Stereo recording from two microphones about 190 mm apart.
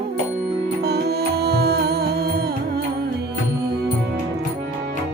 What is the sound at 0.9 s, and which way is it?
Music, 60° right (ahead or behind).